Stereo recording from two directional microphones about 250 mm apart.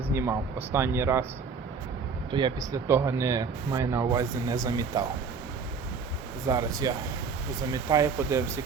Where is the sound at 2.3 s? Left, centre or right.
Centre.